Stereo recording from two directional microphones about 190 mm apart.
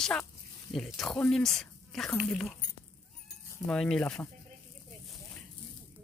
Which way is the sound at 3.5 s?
5° left (ahead or behind).